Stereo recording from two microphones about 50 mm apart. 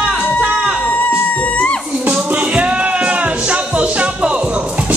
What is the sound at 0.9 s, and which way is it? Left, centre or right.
Music, left.